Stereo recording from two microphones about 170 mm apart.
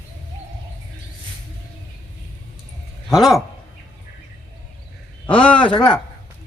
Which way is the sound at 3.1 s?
Centre (ahead or behind).